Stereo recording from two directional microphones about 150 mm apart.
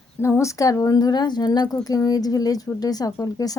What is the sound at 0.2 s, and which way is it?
A woman's voice, 20° left (ahead or behind).